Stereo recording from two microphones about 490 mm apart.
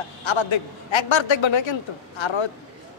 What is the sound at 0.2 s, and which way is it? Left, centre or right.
A man's voice, left.